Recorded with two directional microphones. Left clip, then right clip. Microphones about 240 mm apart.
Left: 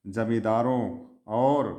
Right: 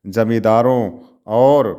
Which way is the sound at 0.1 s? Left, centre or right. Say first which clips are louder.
Right 11 dB; right.